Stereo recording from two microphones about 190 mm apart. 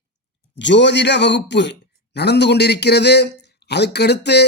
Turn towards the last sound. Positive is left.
turn(degrees=60)  # may be behind; listen again after turning